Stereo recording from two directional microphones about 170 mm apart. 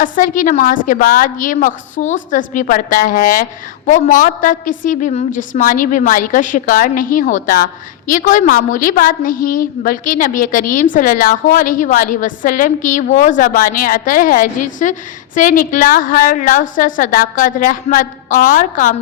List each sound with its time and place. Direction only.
0.0 s a woman's voice: 50° left (ahead or behind)